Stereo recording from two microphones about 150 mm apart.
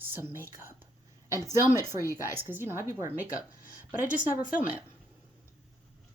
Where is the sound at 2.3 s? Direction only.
15° right (ahead or behind).